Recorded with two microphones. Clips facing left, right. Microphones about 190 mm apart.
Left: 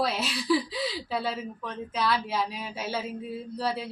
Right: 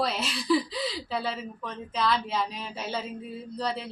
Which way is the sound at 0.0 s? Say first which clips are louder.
Left 1 dB; centre (ahead or behind).